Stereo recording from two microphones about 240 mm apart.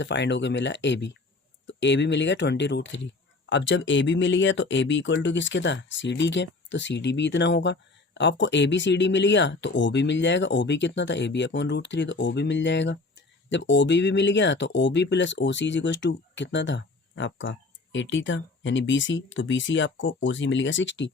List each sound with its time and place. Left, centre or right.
0.0 s speech: left